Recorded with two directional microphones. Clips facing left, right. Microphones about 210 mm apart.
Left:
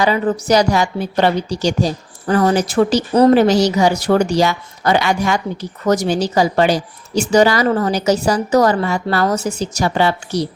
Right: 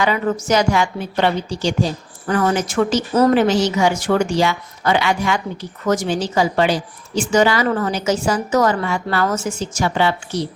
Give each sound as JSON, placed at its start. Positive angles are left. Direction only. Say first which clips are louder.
{"t": 0.0, "sound": "a woman's voice", "louder": "left 3 dB", "side_deg": 35}